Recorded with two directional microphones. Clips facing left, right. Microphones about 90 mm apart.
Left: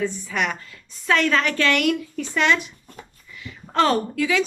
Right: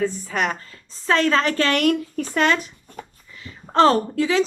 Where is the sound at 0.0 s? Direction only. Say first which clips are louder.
Right 2 dB; 40° right (ahead or behind).